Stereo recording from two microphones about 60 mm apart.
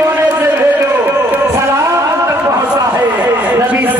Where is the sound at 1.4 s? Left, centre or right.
Right.